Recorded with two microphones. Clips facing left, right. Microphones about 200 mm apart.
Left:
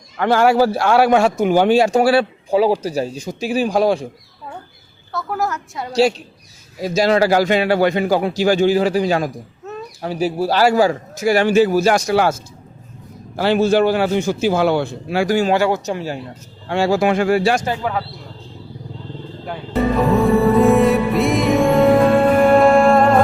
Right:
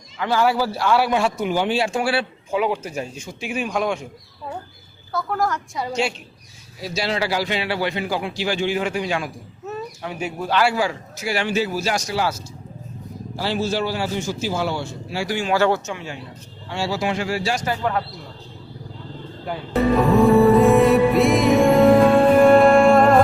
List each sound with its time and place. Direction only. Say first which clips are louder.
0.2 s a man's voice: left 6 dB; 55° left (ahead or behind); by 4.0 s 35° left (ahead or behind)
5.1 s a woman's voice: even; 5° left (ahead or behind)
5.9 s a man's voice: left 10 dB; 35° left (ahead or behind); by 15.4 s 55° left (ahead or behind)
15.5 s a man's voice: left 2 dB; 15° left (ahead or behind)
15.9 s a man's voice: left 8 dB; 35° left (ahead or behind)
16.6 s a man's voice: left 8 dB; 55° left (ahead or behind)
20.0 s music: right 1 dB; centre (ahead or behind)